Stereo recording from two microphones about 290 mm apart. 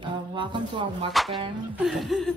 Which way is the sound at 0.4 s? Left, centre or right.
Centre.